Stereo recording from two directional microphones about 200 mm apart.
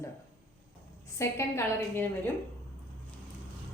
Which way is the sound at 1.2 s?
15° left (ahead or behind).